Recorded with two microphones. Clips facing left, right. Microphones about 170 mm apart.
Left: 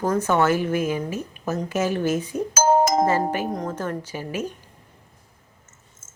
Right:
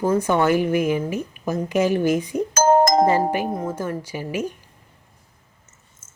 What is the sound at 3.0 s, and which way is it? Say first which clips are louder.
A woman's voice: right 3 dB; 15° right (ahead or behind).